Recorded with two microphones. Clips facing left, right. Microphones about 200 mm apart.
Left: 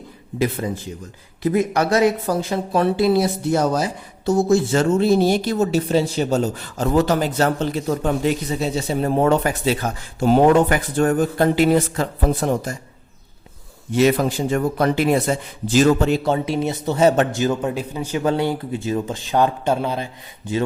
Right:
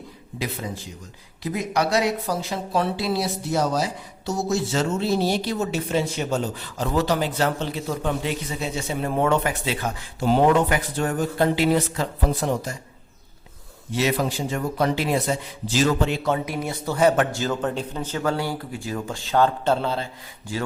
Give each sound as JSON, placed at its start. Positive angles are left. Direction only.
{"t": 1.4, "sound": "speech", "side_deg": 50}
{"t": 13.9, "sound": "a man's voice", "side_deg": 50}